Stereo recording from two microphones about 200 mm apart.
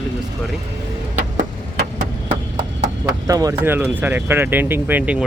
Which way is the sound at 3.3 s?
15° right (ahead or behind).